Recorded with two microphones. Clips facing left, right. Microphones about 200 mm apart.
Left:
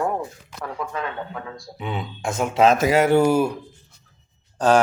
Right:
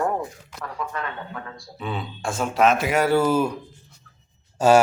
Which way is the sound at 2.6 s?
35° left (ahead or behind).